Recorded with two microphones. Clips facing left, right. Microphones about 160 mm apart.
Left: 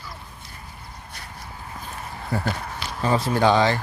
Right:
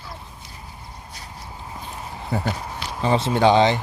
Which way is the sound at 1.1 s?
60° left (ahead or behind).